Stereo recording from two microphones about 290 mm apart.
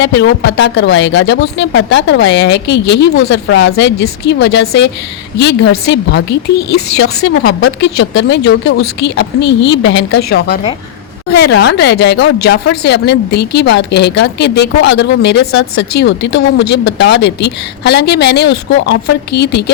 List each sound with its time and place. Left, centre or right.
0.2 s speech: left